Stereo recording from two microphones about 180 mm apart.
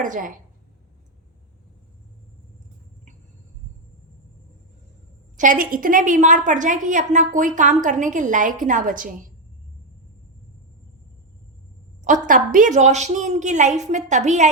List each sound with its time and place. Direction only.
0.0 s a woman's voice: 45° right (ahead or behind)
5.4 s a woman's voice: 45° right (ahead or behind)
12.0 s a woman's voice: 45° right (ahead or behind)